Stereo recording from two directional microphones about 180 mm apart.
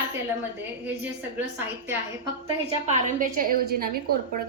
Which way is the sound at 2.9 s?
45° right (ahead or behind).